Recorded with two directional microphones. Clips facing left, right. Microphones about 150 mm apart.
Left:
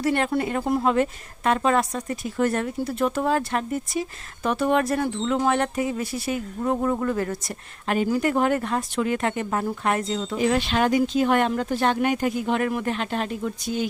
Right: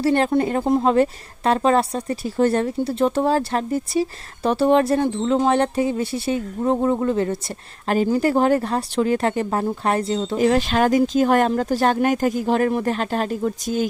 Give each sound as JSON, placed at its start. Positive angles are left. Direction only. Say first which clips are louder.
{"t": 0.0, "sound": "a woman's voice", "louder": "right 5 dB", "side_deg": -30}
{"t": 10.3, "sound": "a woman's voice", "louder": "right 4 dB", "side_deg": -45}